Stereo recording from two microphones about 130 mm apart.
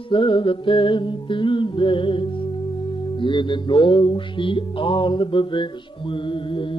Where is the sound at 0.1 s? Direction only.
40° left (ahead or behind).